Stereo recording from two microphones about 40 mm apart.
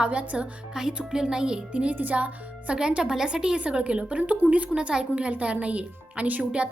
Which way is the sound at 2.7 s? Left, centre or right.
Right.